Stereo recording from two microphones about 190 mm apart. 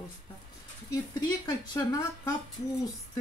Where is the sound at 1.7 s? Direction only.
20° left (ahead or behind).